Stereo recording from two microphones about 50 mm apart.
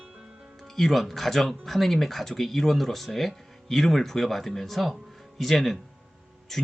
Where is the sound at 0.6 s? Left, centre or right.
Centre.